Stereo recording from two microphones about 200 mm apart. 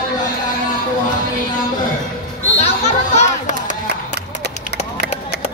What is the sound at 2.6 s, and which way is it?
Music, 35° left (ahead or behind).